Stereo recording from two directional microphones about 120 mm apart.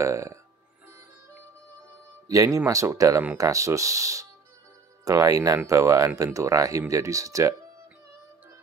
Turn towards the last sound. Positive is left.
turn(degrees=-25)  # may be behind; listen again after turning